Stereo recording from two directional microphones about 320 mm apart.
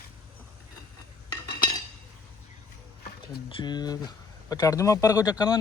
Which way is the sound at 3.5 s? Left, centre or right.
Centre.